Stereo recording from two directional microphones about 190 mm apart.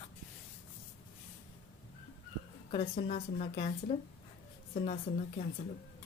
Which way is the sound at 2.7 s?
30° left (ahead or behind).